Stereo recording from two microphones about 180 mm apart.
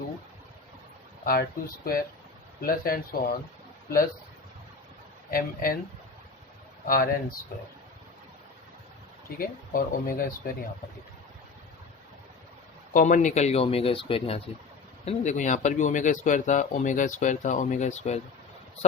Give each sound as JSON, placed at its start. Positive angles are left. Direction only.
{"t": 1.2, "sound": "speech", "side_deg": 55}
{"t": 5.3, "sound": "speech", "side_deg": 55}
{"t": 6.8, "sound": "speech", "side_deg": 55}
{"t": 9.4, "sound": "speech", "side_deg": 55}
{"t": 12.9, "sound": "speech", "side_deg": 45}
{"t": 15.0, "sound": "speech", "side_deg": 45}